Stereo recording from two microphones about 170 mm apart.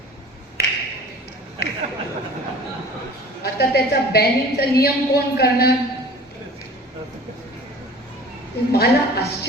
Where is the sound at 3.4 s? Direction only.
70° left (ahead or behind).